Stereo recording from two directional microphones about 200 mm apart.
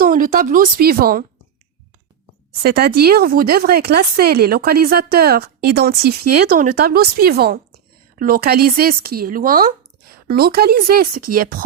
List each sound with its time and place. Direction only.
0.0 s speech: 45° right (ahead or behind)
2.5 s speech: 50° right (ahead or behind)